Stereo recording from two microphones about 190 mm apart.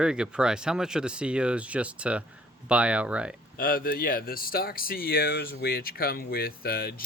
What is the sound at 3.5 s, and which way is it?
Speech, 50° left (ahead or behind).